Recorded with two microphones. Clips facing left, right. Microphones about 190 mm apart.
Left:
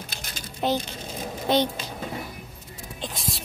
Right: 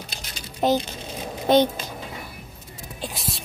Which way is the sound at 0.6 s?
45° right (ahead or behind).